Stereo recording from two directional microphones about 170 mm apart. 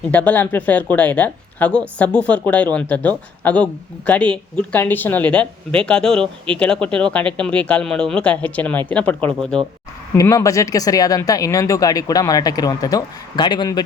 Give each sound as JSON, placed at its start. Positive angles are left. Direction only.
{"t": 0.1, "sound": "speech", "side_deg": 10}
{"t": 10.2, "sound": "speech", "side_deg": 20}